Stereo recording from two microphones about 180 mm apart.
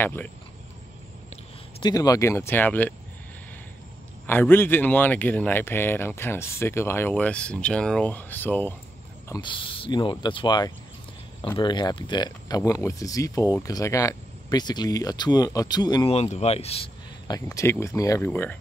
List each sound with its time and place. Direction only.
0.0 s speech: 10° left (ahead or behind)
1.3 s speech: 25° left (ahead or behind)
4.3 s speech: 10° left (ahead or behind)
9.3 s speech: 25° left (ahead or behind)
16.1 s speech: 35° left (ahead or behind)
17.3 s speech: 20° left (ahead or behind)